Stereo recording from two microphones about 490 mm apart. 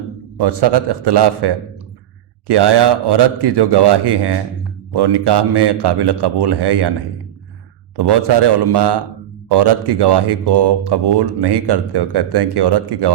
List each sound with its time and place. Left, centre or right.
0.3 s speech: right
7.9 s speech: right